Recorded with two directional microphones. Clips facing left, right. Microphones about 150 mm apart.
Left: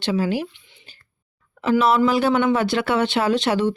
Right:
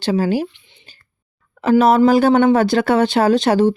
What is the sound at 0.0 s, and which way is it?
Speech, 40° right (ahead or behind).